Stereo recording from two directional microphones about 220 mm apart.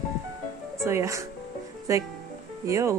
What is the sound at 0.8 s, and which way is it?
Speech, 15° right (ahead or behind).